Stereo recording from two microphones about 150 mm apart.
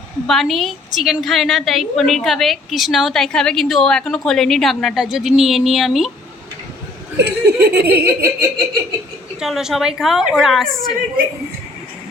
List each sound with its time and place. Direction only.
0.3 s a woman's voice: centre (ahead or behind)
7.2 s speech: 90° right
8.0 s laughter: 20° right (ahead or behind)
9.4 s a woman's voice: 5° right (ahead or behind)